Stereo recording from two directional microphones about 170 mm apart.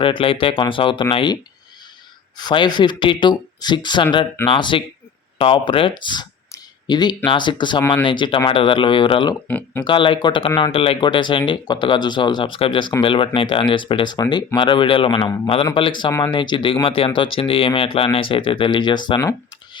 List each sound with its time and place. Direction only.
0.0 s speech: 30° left (ahead or behind)
2.4 s speech: 25° left (ahead or behind)
9.5 s speech: 10° left (ahead or behind)
9.8 s speech: 30° left (ahead or behind)